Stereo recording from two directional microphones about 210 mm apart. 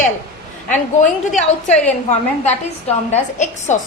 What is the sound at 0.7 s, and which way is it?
A woman's voice, 35° left (ahead or behind).